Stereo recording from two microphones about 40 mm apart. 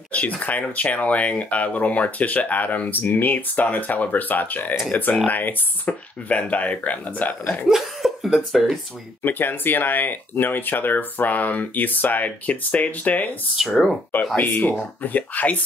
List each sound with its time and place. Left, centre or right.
0.1 s speech: left
7.7 s cough: centre
9.2 s speech: left
13.6 s speech: centre
14.3 s speech: left